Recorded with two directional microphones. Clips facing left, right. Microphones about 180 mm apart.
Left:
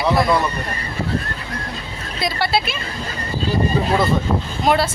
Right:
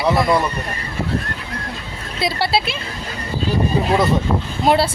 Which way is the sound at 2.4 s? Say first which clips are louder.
Even; 30° right (ahead or behind).